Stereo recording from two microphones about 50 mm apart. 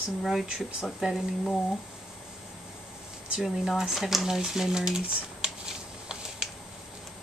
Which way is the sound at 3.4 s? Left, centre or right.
Centre.